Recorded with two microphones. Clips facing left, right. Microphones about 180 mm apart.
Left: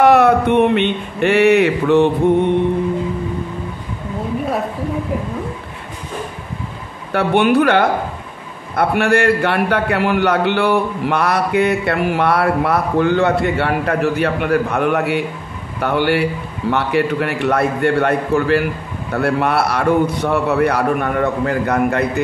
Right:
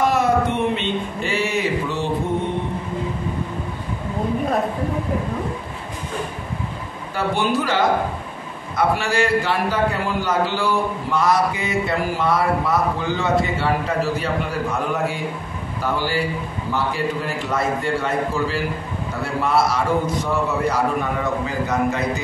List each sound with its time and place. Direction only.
0.0 s speech: 65° left (ahead or behind)
7.1 s a man's voice: 65° left (ahead or behind)